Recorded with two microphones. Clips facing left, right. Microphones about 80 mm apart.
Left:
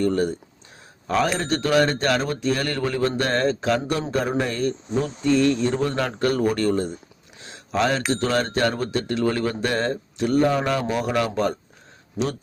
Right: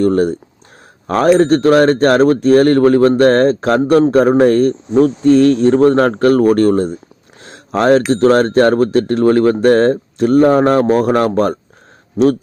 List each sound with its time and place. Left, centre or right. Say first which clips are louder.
0.0 s speech: right 9 dB; right
7.4 s a sound: right 10 dB; right
8.1 s speech: right 12 dB; right